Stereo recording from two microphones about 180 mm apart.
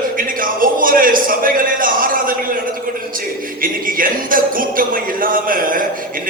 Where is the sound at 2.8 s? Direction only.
50° right (ahead or behind).